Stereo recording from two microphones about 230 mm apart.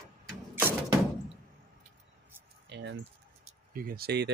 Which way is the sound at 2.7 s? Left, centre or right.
Right.